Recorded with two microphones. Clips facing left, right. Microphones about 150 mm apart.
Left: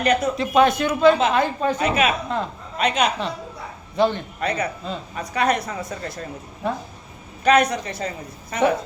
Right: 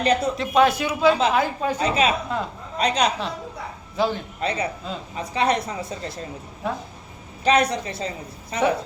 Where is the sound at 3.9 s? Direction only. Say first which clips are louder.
Left 3 dB; 5° right (ahead or behind).